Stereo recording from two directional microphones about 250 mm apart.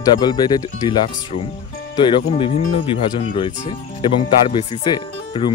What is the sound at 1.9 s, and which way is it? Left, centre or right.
Speech, left.